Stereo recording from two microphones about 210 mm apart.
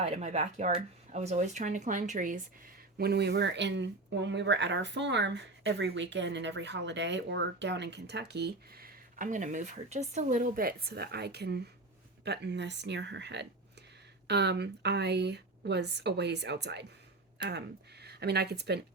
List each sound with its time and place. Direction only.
0.0 s speech: 35° right (ahead or behind)
3.0 s a woman's voice: 50° right (ahead or behind)
18.0 s speech: 50° right (ahead or behind)